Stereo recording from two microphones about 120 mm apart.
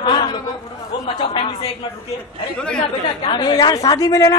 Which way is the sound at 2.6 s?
10° left (ahead or behind).